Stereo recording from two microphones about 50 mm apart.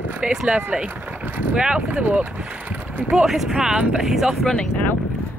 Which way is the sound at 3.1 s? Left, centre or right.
Centre.